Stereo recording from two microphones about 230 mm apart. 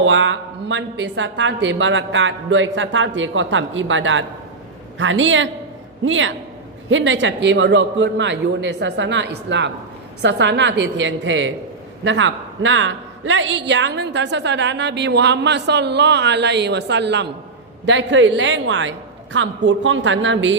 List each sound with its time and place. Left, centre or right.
0.0 s a woman's voice: right